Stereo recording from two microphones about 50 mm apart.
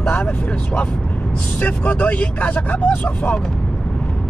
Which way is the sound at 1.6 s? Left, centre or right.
Left.